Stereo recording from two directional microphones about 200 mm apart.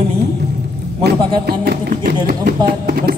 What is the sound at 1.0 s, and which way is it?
Speech, 50° right (ahead or behind).